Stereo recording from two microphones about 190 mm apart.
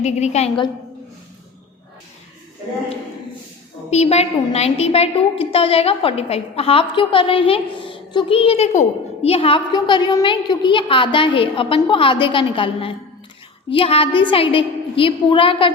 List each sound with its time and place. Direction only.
0.0 s a woman's voice: 35° left (ahead or behind)
3.8 s a woman's voice: 35° left (ahead or behind)